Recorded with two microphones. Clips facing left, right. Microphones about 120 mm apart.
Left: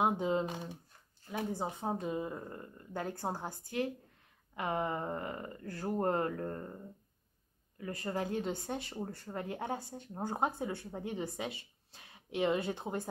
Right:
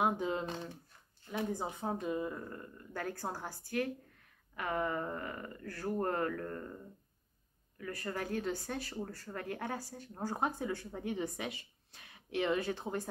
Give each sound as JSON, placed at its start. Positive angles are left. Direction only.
{"t": 0.0, "sound": "speech", "side_deg": 25}
{"t": 0.5, "sound": "speech", "side_deg": 15}